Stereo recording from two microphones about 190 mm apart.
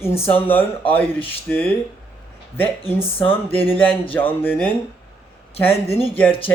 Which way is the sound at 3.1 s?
10° left (ahead or behind).